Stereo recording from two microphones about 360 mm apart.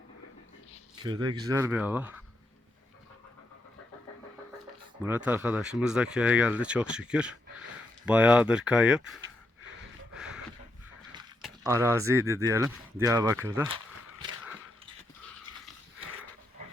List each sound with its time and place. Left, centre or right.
1.0 s speech: centre
5.0 s speech: centre
10.2 s a sound: centre
11.4 s speech: centre